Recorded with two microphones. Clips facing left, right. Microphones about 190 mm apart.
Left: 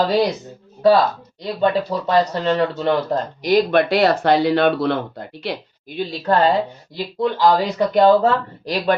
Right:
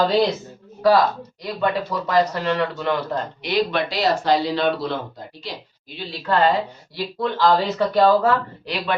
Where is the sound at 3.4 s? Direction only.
50° left (ahead or behind); by 5.5 s 65° left (ahead or behind).